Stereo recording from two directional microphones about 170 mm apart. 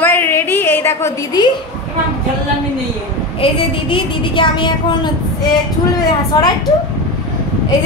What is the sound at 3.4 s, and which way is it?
A woman's voice, 30° left (ahead or behind).